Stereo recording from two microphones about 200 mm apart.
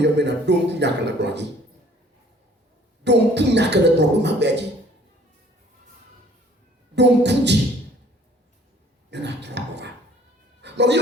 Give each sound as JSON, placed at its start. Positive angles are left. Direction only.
{"t": 0.0, "sound": "speech", "side_deg": -60}
{"t": 3.0, "sound": "speech", "side_deg": -60}
{"t": 6.9, "sound": "speech", "side_deg": -60}
{"t": 9.0, "sound": "speech", "side_deg": -60}
{"t": 10.6, "sound": "cat", "side_deg": -60}